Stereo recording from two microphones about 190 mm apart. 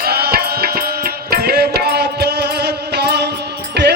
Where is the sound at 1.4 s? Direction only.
55° right (ahead or behind).